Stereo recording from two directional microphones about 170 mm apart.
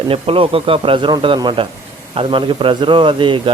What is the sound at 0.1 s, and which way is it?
Speech, 30° right (ahead or behind).